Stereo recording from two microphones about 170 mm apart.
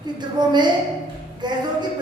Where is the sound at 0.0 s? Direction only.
25° right (ahead or behind).